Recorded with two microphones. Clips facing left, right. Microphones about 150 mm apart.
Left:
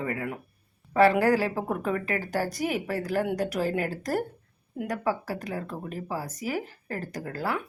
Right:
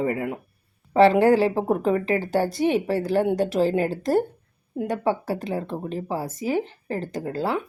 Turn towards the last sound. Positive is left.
turn(degrees=-25)  # may be behind; listen again after turning